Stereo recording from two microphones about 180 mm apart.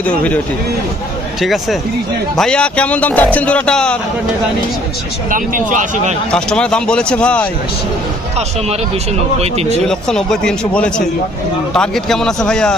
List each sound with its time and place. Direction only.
0.0 s speech: 10° left (ahead or behind)
1.4 s speech: centre (ahead or behind)
5.3 s speech: 45° right (ahead or behind)
6.3 s speech: 5° left (ahead or behind)
9.4 s speech: 35° right (ahead or behind)
9.8 s speech: 5° left (ahead or behind)